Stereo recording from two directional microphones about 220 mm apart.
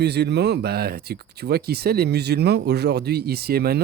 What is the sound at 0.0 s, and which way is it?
Speech, 50° right (ahead or behind).